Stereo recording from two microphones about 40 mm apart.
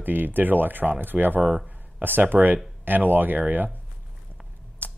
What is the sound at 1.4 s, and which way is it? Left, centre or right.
Speech, centre.